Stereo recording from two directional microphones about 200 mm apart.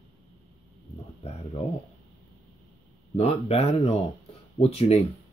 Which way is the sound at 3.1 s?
30° left (ahead or behind).